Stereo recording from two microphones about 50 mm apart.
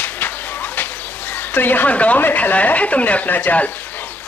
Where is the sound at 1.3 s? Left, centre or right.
Left.